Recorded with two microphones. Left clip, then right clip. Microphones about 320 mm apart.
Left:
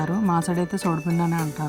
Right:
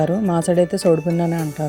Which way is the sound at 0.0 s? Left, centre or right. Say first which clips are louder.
Right 5 dB; centre.